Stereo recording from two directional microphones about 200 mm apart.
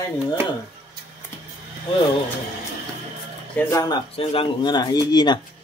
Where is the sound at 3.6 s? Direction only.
15° left (ahead or behind).